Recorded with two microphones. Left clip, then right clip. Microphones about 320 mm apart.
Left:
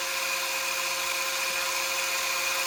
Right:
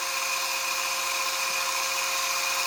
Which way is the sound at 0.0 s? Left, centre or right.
Centre.